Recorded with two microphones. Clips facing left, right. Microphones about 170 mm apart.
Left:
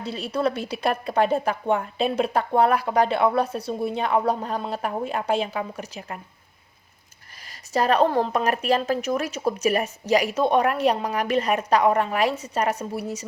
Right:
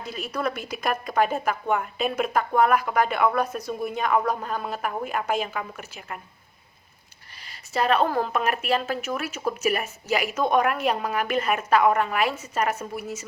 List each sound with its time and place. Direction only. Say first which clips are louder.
0.0 s speech: left 4 dB; 30° left (ahead or behind)
7.4 s speech: left 2 dB; 40° left (ahead or behind)